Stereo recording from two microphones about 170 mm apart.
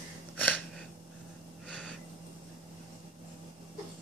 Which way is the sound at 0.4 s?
10° left (ahead or behind).